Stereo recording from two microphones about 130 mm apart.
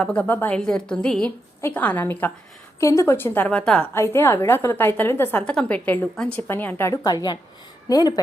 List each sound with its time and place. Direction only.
0.0 s a woman's voice: 10° left (ahead or behind)
5.4 s a woman's voice: 10° left (ahead or behind); by 8.2 s 30° left (ahead or behind)